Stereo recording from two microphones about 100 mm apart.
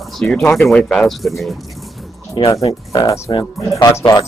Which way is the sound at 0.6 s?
5° left (ahead or behind).